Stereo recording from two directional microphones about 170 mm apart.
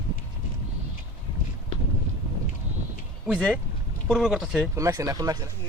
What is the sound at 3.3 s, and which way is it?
Speech, centre (ahead or behind).